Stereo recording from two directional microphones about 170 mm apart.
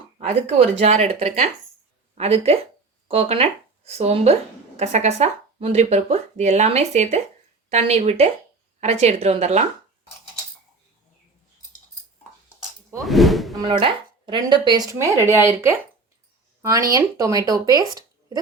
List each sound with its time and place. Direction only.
0.2 s speech: 40° right (ahead or behind)
13.1 s a sound: centre (ahead or behind)
13.6 s speech: 30° right (ahead or behind); by 15.7 s 15° right (ahead or behind)
16.9 s speech: 20° right (ahead or behind)